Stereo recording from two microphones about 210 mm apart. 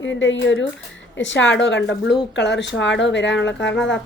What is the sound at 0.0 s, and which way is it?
A woman's voice, 60° left (ahead or behind).